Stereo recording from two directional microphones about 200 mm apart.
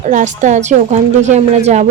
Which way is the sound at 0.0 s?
40° right (ahead or behind).